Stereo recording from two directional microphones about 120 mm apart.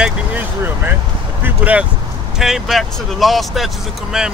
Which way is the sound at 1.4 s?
10° right (ahead or behind).